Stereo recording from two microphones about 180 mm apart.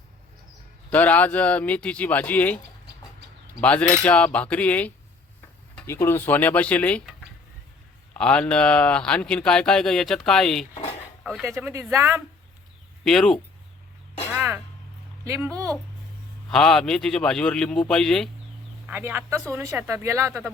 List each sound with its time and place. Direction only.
0.9 s speech: 10° left (ahead or behind)
3.6 s speech: 5° left (ahead or behind)
8.1 s speech: 5° left (ahead or behind)
11.2 s a sound: centre (ahead or behind)
11.4 s speech: 15° right (ahead or behind)
13.1 s speech: 5° left (ahead or behind)
14.3 s a sound: 10° right (ahead or behind)
15.2 s speech: 15° right (ahead or behind)
16.5 s speech: 5° left (ahead or behind)
18.9 s speech: 10° right (ahead or behind)